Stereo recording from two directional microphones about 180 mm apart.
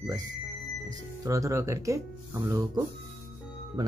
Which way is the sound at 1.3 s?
15° right (ahead or behind).